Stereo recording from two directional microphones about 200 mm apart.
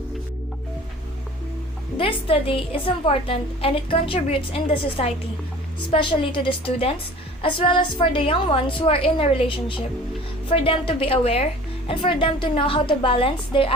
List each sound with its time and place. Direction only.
2.0 s a woman's voice: 25° left (ahead or behind)